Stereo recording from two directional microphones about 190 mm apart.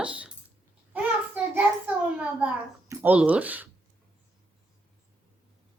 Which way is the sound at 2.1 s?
10° right (ahead or behind).